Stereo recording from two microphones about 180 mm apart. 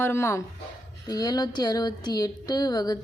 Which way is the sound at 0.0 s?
15° left (ahead or behind).